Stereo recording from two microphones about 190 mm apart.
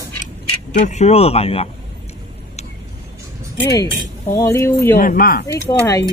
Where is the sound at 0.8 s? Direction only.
35° left (ahead or behind).